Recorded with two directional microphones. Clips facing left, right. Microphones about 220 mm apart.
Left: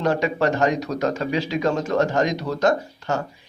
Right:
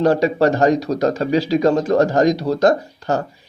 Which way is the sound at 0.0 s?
35° right (ahead or behind).